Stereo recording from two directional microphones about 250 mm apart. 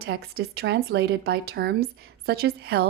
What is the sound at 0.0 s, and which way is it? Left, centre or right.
A woman's voice, right.